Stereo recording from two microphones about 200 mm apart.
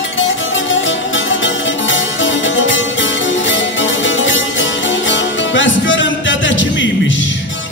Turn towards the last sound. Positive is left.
turn(degrees=70)  # may be behind; listen again after turning